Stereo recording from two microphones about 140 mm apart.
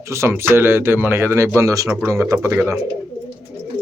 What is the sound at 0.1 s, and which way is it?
Speech, 20° right (ahead or behind).